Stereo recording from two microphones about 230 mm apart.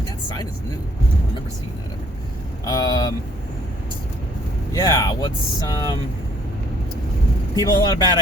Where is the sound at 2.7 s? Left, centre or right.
Centre.